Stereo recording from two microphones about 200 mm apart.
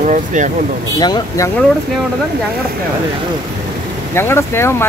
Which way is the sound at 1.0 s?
20° left (ahead or behind).